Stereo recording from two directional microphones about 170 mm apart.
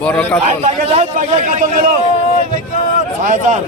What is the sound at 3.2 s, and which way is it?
Speech, 50° right (ahead or behind).